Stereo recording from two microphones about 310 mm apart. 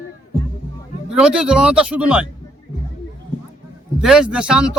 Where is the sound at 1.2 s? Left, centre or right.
Centre.